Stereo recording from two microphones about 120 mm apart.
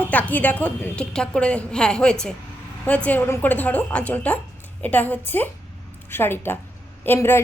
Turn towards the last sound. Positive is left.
turn(degrees=20)  # may be behind; listen again after turning